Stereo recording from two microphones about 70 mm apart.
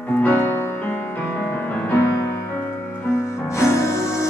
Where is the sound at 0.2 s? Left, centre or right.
Left.